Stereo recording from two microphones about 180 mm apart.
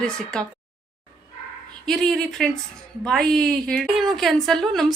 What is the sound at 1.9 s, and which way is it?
A woman's voice, centre (ahead or behind).